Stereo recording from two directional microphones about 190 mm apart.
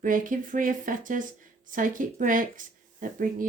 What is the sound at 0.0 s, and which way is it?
Speech, 45° right (ahead or behind).